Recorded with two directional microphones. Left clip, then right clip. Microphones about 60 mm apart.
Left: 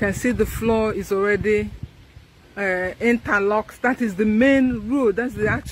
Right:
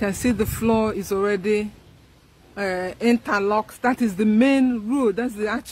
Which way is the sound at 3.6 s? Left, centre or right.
Left.